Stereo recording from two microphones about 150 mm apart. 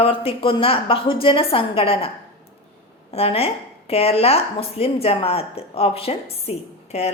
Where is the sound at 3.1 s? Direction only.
40° left (ahead or behind).